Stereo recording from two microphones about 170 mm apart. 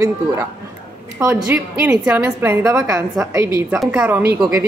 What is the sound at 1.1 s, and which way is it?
Speech, 15° right (ahead or behind).